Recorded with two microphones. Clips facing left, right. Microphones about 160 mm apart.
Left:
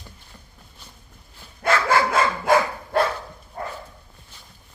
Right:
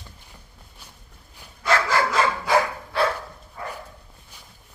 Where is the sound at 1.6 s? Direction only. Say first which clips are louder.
Left 2 dB; 55° left (ahead or behind).